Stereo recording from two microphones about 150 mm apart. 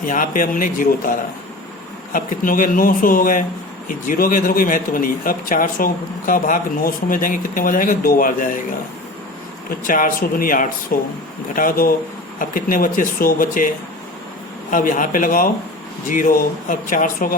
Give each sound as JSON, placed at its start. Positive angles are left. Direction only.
{"t": 0.0, "sound": "speech", "side_deg": 65}
{"t": 2.1, "sound": "speech", "side_deg": 65}
{"t": 9.8, "sound": "speech", "side_deg": 65}
{"t": 14.7, "sound": "speech", "side_deg": 60}